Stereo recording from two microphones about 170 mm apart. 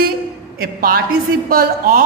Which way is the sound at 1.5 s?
55° right (ahead or behind).